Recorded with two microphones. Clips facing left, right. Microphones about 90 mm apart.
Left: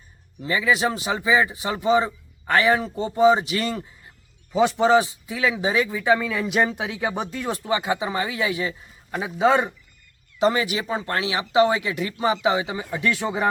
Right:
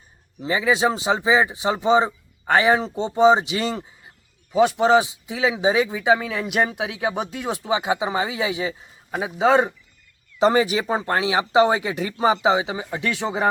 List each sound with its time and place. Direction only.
0.4 s a man's voice: 25° right (ahead or behind)
10.3 s speech: 35° right (ahead or behind)